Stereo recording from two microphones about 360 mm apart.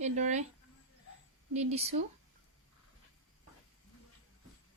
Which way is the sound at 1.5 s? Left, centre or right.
Centre.